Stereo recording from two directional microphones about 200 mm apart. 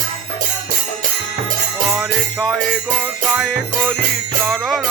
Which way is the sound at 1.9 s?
Centre (ahead or behind).